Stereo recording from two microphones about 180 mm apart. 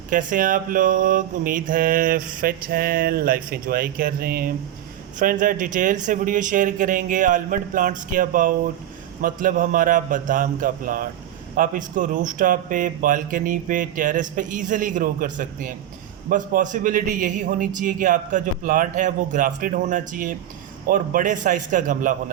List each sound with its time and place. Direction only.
0.1 s mantra: 45° right (ahead or behind)